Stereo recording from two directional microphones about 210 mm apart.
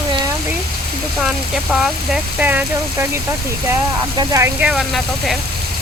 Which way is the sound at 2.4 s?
10° right (ahead or behind).